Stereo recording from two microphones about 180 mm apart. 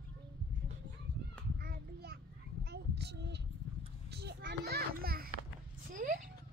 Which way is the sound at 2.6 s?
65° right (ahead or behind).